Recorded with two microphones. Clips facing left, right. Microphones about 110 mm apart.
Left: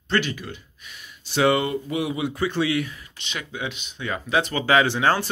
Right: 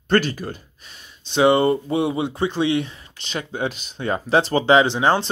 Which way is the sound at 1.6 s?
35° right (ahead or behind).